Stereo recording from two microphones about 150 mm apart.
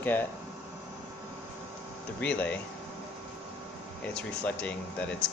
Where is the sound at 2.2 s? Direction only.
10° left (ahead or behind).